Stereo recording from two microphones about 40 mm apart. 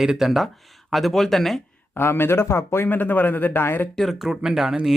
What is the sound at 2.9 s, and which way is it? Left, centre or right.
Speech, left.